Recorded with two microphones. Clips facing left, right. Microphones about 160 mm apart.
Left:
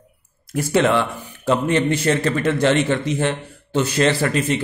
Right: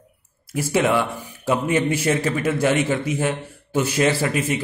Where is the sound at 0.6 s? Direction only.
10° right (ahead or behind).